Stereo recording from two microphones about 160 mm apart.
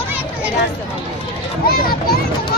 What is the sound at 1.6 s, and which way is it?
Children playing, 70° left (ahead or behind).